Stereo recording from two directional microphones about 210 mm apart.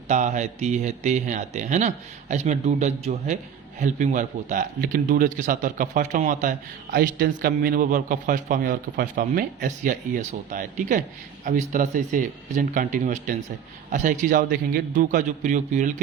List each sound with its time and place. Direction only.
0.1 s a man's voice: 35° right (ahead or behind)